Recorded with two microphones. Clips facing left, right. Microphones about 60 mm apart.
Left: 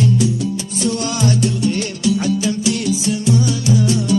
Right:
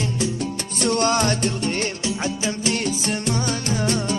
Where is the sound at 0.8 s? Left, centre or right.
Right.